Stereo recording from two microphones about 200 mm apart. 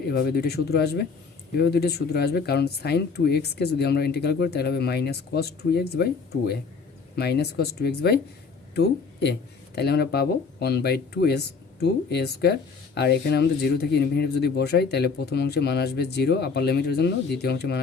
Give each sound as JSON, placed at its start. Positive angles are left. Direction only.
{"t": 0.1, "sound": "speech", "side_deg": 55}